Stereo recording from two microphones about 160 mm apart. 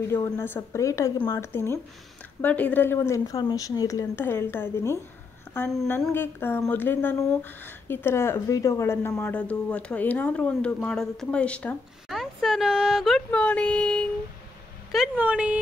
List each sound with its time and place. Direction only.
0.1 s a woman's voice: 15° left (ahead or behind)
14.9 s speech: 5° right (ahead or behind)